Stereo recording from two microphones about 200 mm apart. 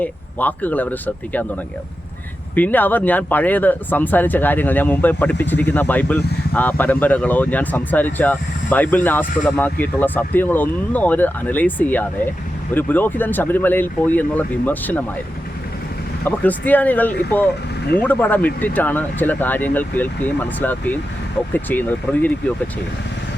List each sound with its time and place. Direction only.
0.0 s speech: 10° left (ahead or behind)
2.6 s speech: 10° left (ahead or behind)
16.2 s speech: 10° left (ahead or behind)